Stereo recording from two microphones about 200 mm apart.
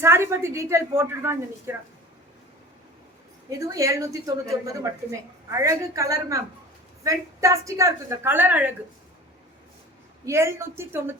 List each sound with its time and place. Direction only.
0.0 s a woman's voice: 10° right (ahead or behind)
3.6 s a woman's voice: 15° right (ahead or behind)
10.2 s a woman's voice: 15° right (ahead or behind)